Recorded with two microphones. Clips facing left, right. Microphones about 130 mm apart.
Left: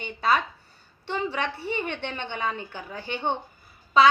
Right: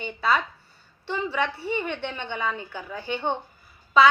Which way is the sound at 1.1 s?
25° left (ahead or behind).